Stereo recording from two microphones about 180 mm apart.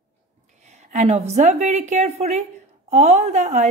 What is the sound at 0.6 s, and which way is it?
A woman's voice, 40° right (ahead or behind).